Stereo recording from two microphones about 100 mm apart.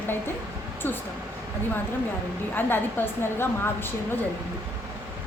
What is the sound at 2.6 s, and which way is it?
A woman's voice, 20° left (ahead or behind).